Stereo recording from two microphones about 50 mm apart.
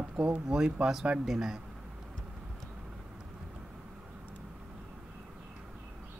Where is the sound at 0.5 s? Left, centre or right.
Centre.